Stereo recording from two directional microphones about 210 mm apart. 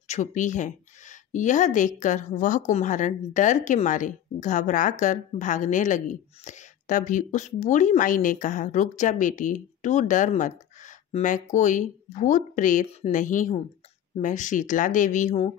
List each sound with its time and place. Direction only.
0.1 s a woman's voice: 35° left (ahead or behind)